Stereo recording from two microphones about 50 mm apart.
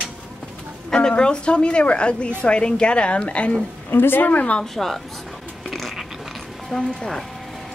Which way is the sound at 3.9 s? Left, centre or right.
Left.